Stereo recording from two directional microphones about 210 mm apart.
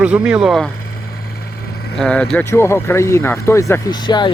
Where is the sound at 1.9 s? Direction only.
5° left (ahead or behind); by 4.3 s 20° left (ahead or behind).